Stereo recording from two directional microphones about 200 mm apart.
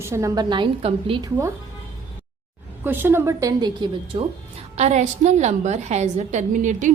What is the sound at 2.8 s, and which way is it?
A woman's voice, 10° right (ahead or behind).